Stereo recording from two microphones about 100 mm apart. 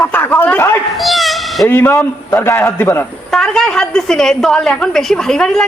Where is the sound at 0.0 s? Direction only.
20° left (ahead or behind).